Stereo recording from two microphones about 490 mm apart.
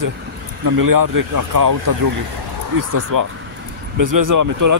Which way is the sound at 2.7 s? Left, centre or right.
Right.